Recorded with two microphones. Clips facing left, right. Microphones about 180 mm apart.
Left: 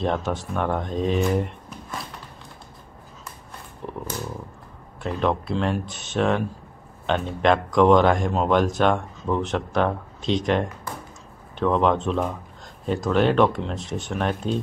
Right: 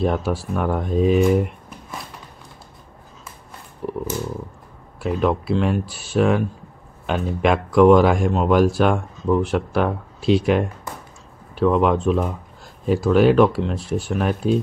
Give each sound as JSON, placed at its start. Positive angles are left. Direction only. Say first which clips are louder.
{"t": 0.0, "sound": "speech", "louder": "right 3 dB", "side_deg": -5}
{"t": 3.8, "sound": "a sound", "louder": "right 7 dB", "side_deg": -5}
{"t": 5.0, "sound": "speech", "louder": "right 3 dB", "side_deg": -5}